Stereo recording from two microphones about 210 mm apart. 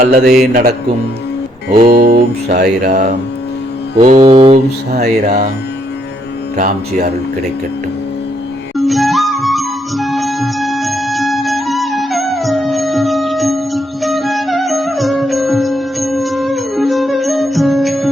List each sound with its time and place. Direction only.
0.0 s music: 45° right (ahead or behind)
2.9 s mantra: 35° right (ahead or behind)
6.6 s mantra: 35° right (ahead or behind)
8.8 s music: centre (ahead or behind)